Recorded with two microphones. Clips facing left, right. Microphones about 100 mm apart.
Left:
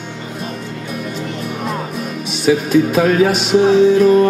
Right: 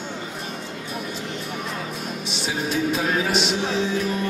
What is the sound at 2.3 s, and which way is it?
Music, 60° left (ahead or behind).